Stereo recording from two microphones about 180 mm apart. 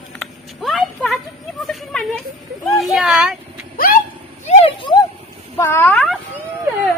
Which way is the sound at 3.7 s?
55° left (ahead or behind).